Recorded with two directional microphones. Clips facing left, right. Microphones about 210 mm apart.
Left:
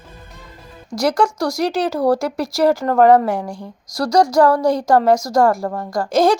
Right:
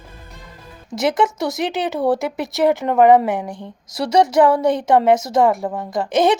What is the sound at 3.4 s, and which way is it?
Speech, 20° right (ahead or behind).